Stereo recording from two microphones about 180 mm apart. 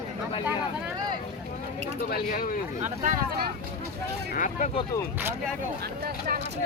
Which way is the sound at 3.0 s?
50° right (ahead or behind).